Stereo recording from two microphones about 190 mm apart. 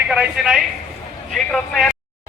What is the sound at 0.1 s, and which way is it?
A man's voice, 5° right (ahead or behind).